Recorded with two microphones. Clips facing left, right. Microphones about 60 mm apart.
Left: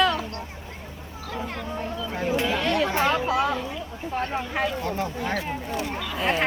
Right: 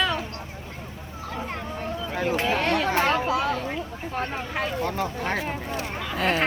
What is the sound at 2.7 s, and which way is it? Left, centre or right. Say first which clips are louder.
Speech: even; right.